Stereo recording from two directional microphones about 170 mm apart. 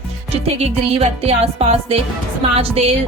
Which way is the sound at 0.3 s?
35° right (ahead or behind).